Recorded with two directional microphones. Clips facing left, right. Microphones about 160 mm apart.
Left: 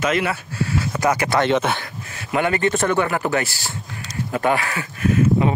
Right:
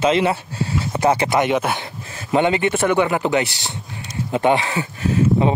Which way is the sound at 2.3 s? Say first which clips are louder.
Right 2 dB; 20° right (ahead or behind).